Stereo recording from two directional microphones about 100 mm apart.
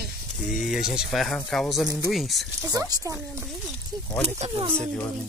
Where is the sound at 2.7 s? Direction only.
35° right (ahead or behind).